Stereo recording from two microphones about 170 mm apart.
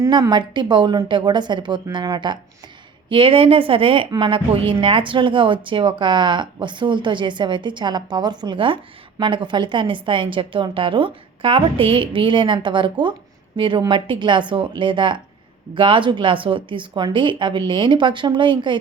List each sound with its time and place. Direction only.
0.0 s a woman's voice: 25° right (ahead or behind)